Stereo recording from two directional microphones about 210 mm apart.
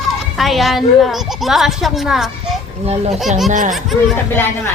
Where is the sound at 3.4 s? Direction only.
35° right (ahead or behind).